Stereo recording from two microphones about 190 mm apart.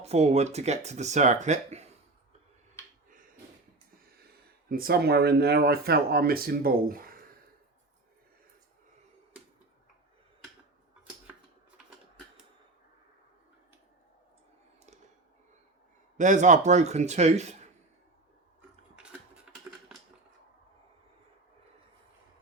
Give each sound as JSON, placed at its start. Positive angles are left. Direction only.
{"t": 0.0, "sound": "speech", "side_deg": -35}
{"t": 4.7, "sound": "speech", "side_deg": -50}
{"t": 16.1, "sound": "speech", "side_deg": -40}
{"t": 19.5, "sound": "a sound", "side_deg": -5}